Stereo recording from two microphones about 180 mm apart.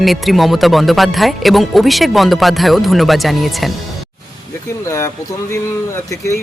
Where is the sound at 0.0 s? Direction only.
Centre (ahead or behind).